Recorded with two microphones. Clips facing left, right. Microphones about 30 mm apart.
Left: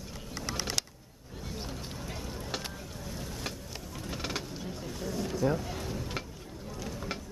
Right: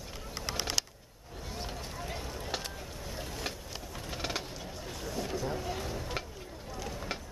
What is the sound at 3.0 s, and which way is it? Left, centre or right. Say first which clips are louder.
Boat: even; centre.